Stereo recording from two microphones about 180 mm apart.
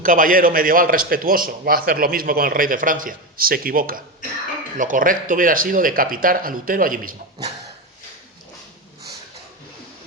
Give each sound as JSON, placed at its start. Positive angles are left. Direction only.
{"t": 0.0, "sound": "a man's voice", "side_deg": -50}